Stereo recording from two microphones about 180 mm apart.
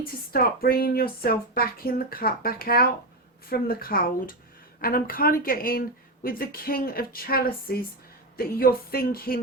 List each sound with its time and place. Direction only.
0.0 s speech: 55° left (ahead or behind)